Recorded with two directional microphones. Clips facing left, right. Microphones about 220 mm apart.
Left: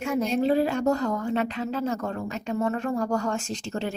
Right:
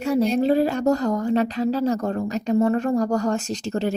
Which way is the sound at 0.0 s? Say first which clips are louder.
Right 5 dB; 35° right (ahead or behind).